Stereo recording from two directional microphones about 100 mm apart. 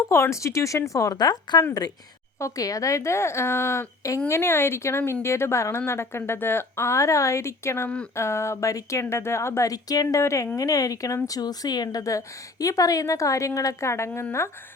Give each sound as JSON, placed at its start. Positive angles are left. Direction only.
{"t": 0.1, "sound": "a woman's voice", "side_deg": 30}